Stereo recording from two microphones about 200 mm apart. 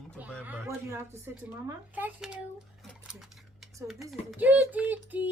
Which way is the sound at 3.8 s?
Centre (ahead or behind).